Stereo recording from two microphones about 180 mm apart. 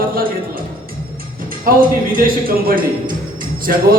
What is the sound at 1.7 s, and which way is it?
Music, 55° right (ahead or behind).